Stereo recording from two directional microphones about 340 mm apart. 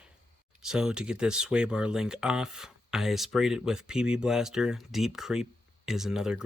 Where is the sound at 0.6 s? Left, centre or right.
Centre.